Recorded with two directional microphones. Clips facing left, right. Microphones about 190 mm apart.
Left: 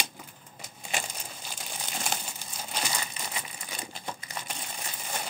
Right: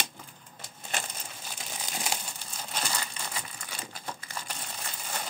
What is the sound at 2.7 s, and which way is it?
Crumpling, 10° left (ahead or behind).